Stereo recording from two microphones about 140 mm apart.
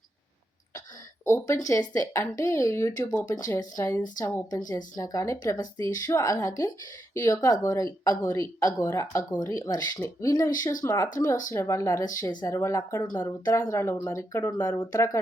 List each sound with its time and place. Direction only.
1.2 s speech: 20° left (ahead or behind)